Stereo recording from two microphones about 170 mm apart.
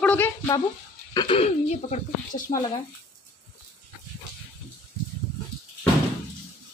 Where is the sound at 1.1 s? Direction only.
30° left (ahead or behind); by 2.5 s 45° left (ahead or behind).